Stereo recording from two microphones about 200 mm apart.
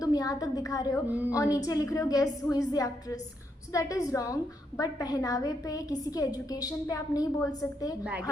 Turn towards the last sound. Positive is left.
turn(degrees=15)  # may be behind; listen again after turning